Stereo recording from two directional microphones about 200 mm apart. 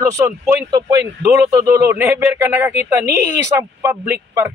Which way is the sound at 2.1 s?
10° right (ahead or behind).